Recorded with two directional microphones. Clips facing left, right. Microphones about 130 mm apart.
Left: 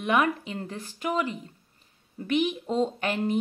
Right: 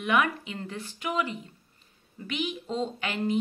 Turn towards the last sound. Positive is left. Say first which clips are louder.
# left 2 dB
turn(degrees=45)  # may be behind; listen again after turning